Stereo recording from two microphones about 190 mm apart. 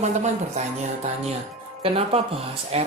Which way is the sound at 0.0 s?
35° right (ahead or behind).